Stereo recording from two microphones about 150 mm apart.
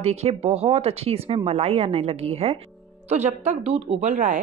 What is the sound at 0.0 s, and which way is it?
A woman's voice, 45° right (ahead or behind).